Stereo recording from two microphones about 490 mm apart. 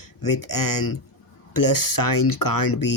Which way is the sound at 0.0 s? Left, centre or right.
Left.